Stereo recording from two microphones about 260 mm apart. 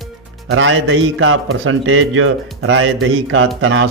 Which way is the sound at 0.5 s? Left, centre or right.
Right.